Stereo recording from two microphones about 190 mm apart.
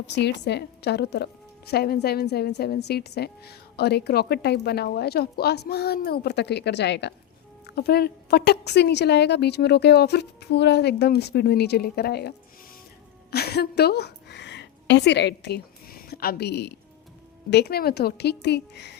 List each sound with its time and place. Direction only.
0.1 s a woman's voice: 65° left (ahead or behind)
13.3 s a woman's voice: 55° left (ahead or behind)